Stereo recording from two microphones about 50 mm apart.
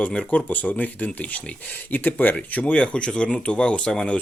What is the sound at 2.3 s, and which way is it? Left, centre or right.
Speech, left.